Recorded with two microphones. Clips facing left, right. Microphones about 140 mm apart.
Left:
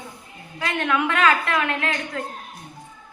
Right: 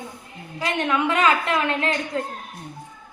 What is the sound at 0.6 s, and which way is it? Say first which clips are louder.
A woman's voice: right 1 dB; 20° right (ahead or behind).